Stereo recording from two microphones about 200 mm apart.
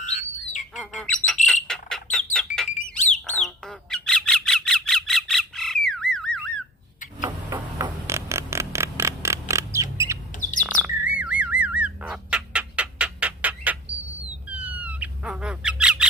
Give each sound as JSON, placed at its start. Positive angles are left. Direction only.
{"t": 0.0, "sound": "bird", "side_deg": 35}
{"t": 0.8, "sound": "bird", "side_deg": 5}
{"t": 3.2, "sound": "squawk", "side_deg": 5}
{"t": 7.2, "sound": "a sound", "side_deg": -15}
{"t": 10.6, "sound": "squawk", "side_deg": -5}
{"t": 11.2, "sound": "bird", "side_deg": -5}
{"t": 14.5, "sound": "squawk", "side_deg": -5}